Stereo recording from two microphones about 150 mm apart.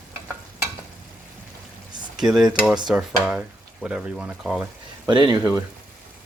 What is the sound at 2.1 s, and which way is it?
Cutlery, 5° right (ahead or behind).